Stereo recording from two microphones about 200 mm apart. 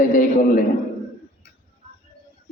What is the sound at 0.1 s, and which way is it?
Speech, 45° left (ahead or behind).